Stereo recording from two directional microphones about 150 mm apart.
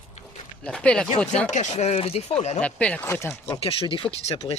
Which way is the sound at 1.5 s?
50° left (ahead or behind).